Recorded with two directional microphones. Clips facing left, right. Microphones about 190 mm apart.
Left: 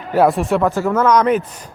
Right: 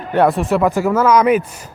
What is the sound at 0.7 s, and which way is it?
Speech, 10° right (ahead or behind).